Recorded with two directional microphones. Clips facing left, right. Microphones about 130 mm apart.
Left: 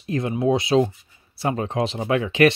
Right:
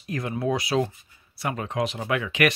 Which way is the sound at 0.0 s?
25° left (ahead or behind).